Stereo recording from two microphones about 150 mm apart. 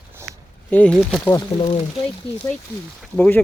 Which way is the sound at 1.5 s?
35° left (ahead or behind).